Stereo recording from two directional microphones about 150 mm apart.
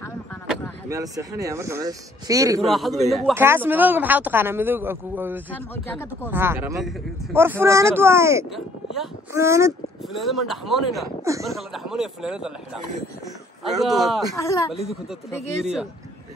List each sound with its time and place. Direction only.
0.8 s speech: 20° right (ahead or behind)
2.6 s speech: centre (ahead or behind)
3.3 s speech: 15° right (ahead or behind)
5.5 s speech: 15° left (ahead or behind)
6.3 s speech: 15° right (ahead or behind)
8.5 s speech: centre (ahead or behind)
9.3 s speech: 20° right (ahead or behind)
10.0 s speech: centre (ahead or behind)
13.7 s speech: centre (ahead or behind)
14.3 s speech: 20° left (ahead or behind)
15.6 s speech: 5° right (ahead or behind)